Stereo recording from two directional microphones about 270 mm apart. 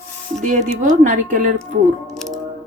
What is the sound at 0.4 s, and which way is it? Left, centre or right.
Speech, right.